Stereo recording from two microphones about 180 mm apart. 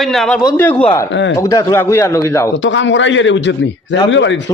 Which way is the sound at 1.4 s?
15° left (ahead or behind).